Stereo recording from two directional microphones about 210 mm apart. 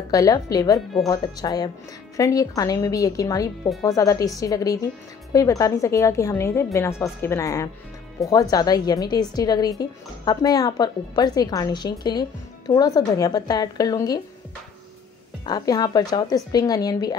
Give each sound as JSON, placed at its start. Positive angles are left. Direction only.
{"t": 0.1, "sound": "a woman's voice", "side_deg": 15}
{"t": 15.4, "sound": "a woman's voice", "side_deg": 20}